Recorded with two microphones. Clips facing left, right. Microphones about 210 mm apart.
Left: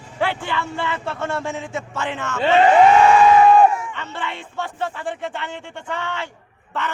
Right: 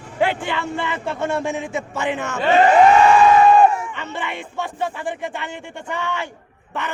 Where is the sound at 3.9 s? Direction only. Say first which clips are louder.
Right 2 dB; 15° right (ahead or behind).